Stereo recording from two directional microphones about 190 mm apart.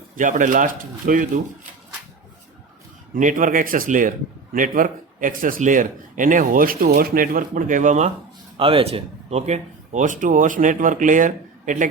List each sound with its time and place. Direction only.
0.2 s speech: 40° right (ahead or behind)
3.2 s speech: 40° right (ahead or behind)